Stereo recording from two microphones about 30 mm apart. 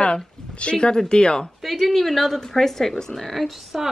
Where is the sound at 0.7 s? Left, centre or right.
Left.